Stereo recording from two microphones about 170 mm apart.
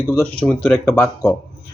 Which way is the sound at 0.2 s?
5° left (ahead or behind).